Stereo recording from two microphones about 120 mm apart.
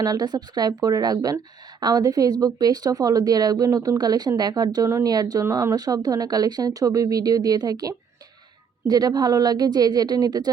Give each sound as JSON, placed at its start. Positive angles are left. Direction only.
{"t": 0.0, "sound": "a woman's voice", "side_deg": -30}